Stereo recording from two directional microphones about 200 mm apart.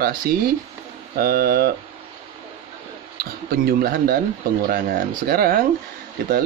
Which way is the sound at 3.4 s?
45° right (ahead or behind).